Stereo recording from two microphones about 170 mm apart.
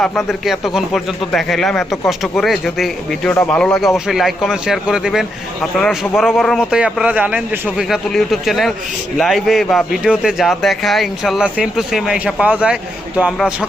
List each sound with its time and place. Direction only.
0.0 s speech: centre (ahead or behind)